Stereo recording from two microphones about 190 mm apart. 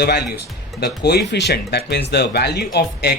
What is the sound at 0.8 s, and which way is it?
Speech, 60° left (ahead or behind).